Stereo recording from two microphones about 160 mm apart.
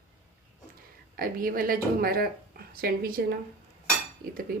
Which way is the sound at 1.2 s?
65° right (ahead or behind).